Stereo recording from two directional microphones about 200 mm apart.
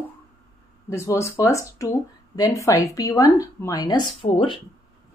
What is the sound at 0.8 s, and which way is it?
Speech, 15° left (ahead or behind).